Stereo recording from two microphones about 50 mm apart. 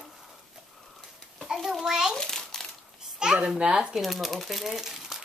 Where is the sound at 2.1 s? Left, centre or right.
Centre.